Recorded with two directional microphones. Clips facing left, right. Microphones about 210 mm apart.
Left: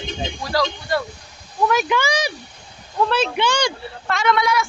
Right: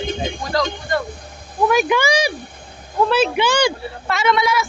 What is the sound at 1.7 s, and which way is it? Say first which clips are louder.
Speech: right 4 dB; 15° right (ahead or behind).